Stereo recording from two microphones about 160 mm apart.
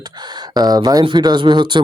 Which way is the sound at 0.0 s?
25° right (ahead or behind).